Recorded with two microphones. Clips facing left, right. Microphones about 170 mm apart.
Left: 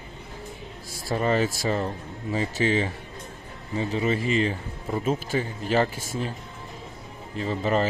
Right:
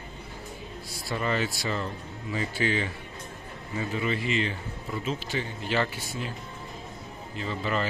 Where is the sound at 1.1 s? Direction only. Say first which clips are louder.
Left 5 dB; 40° left (ahead or behind).